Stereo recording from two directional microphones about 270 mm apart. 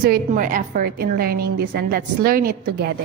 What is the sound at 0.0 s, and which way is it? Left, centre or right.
A woman's voice, right.